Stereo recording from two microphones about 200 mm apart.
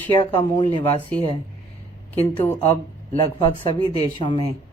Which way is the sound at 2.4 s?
10° left (ahead or behind).